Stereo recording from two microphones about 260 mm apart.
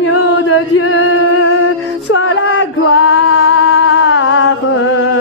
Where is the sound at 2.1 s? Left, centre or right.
Left.